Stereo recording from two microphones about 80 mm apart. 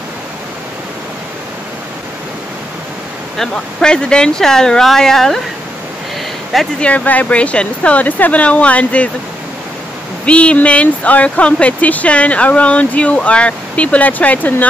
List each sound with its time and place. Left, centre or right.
3.3 s speech: centre
6.8 s speech: centre
10.2 s speech: centre